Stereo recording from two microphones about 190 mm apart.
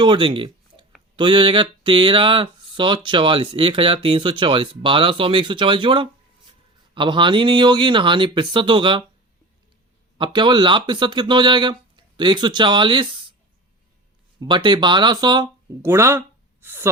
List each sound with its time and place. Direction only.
0.0 s speech: 25° right (ahead or behind)
10.2 s speech: 25° right (ahead or behind)
14.4 s speech: 25° right (ahead or behind)